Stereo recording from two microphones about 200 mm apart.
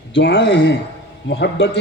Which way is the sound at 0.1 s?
65° left (ahead or behind).